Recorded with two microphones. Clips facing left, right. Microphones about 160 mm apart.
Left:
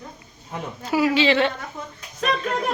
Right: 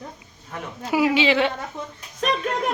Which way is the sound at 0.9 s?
15° right (ahead or behind).